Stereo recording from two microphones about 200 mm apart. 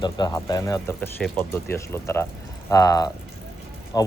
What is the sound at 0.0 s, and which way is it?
Speech, 20° left (ahead or behind).